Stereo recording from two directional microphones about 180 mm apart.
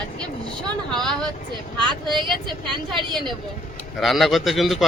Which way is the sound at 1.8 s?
25° right (ahead or behind).